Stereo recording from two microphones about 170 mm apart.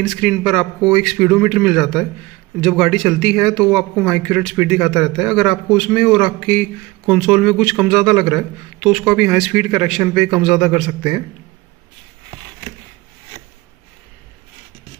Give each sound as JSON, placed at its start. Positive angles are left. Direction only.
{"t": 0.1, "sound": "speech", "side_deg": 5}
{"t": 11.0, "sound": "a man's voice", "side_deg": -15}